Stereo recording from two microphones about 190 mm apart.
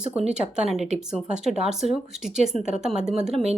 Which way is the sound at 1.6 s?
Centre (ahead or behind).